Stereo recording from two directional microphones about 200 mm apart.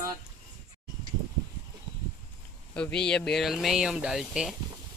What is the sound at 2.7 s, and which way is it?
Speech, 5° left (ahead or behind).